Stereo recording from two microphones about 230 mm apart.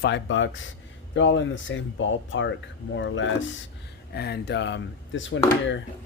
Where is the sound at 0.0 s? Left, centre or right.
Left.